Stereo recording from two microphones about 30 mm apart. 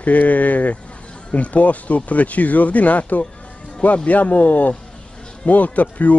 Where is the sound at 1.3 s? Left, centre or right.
Left.